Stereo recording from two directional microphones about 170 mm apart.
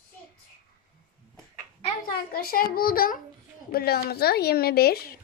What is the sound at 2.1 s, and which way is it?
A child's voice, 65° left (ahead or behind).